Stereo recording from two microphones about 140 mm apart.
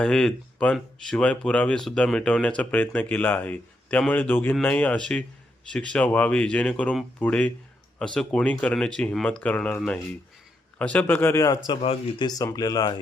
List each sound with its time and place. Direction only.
0.0 s speech: 5° left (ahead or behind); by 13.0 s 30° left (ahead or behind)